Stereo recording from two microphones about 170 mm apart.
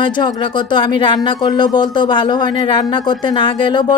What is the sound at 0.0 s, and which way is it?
Speech, 30° left (ahead or behind).